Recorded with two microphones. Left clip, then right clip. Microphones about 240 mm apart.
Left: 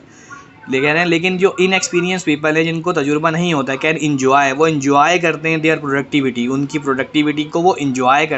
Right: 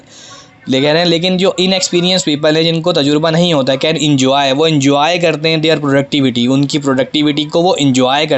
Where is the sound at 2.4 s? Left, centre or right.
Right.